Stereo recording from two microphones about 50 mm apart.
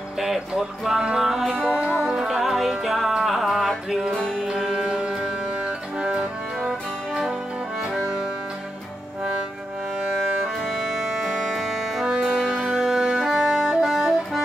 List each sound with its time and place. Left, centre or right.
0.2 s music: centre
4.6 s music: centre
8.0 s music: centre
11.2 s music: centre